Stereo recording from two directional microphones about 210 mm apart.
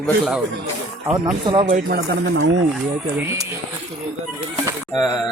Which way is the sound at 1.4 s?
25° right (ahead or behind).